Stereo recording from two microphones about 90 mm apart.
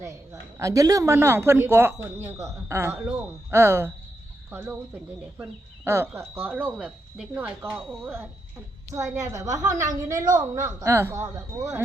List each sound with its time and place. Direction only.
0.5 s speech: 40° right (ahead or behind)
2.9 s speech: 15° right (ahead or behind)
3.5 s speech: 30° right (ahead or behind)
8.9 s a woman's voice: 40° right (ahead or behind)